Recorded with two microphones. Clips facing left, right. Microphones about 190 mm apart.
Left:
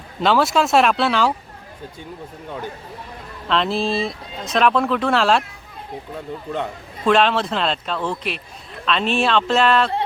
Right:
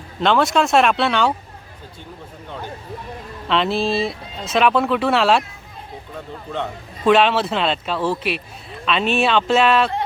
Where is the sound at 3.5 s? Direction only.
Centre (ahead or behind).